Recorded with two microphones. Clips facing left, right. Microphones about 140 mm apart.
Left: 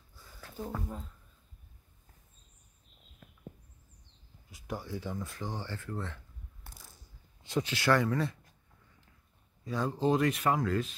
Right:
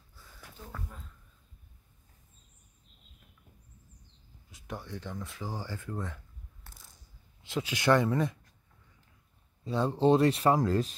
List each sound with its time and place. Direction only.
3.2 s a sound: 90° left
4.5 s speech: centre (ahead or behind); by 6.2 s 15° right (ahead or behind)
6.7 s coin: 10° left (ahead or behind)
7.4 s speech: centre (ahead or behind)
7.7 s speech: 20° right (ahead or behind)
9.7 s speech: 30° right (ahead or behind)